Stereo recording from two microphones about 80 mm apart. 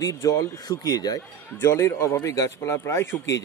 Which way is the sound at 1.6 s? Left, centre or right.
Left.